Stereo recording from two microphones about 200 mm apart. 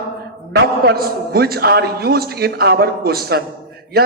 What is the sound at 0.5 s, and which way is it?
Speech, 50° right (ahead or behind).